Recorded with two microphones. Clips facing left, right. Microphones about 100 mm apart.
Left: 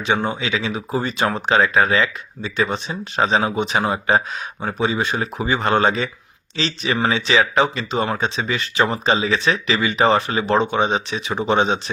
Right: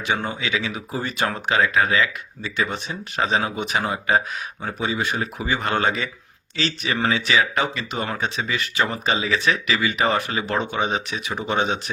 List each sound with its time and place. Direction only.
0.0 s speech: 25° left (ahead or behind)